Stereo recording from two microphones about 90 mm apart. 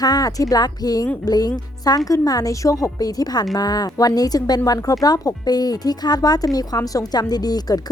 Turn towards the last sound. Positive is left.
turn(degrees=45)  # may be behind; listen again after turning